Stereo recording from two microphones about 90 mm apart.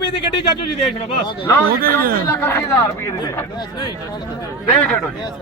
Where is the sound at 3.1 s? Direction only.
45° left (ahead or behind).